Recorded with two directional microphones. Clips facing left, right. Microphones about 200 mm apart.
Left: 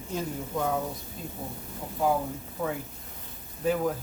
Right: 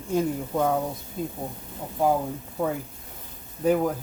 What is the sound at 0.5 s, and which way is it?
Speech, 55° right (ahead or behind).